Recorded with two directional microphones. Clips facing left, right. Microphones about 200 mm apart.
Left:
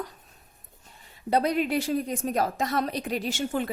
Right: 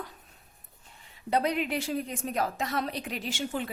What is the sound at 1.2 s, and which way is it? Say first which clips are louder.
A woman's voice: left 3 dB; 40° left (ahead or behind).